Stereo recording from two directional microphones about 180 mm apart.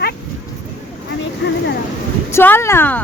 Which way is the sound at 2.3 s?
15° left (ahead or behind).